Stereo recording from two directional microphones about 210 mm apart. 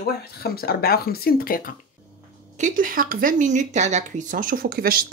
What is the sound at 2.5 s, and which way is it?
Speech, 40° right (ahead or behind).